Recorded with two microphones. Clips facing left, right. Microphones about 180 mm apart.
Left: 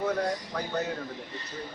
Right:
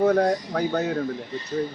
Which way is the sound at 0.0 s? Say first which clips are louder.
Right 9 dB; 50° right (ahead or behind).